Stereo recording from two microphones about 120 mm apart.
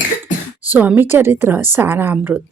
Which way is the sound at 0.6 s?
15° right (ahead or behind).